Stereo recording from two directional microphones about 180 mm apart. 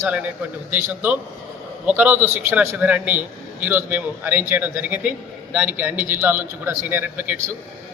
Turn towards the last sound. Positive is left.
turn(degrees=-10)  # may be behind; listen again after turning